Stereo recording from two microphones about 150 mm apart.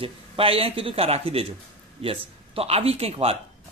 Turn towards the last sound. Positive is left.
turn(degrees=-40)  # may be behind; listen again after turning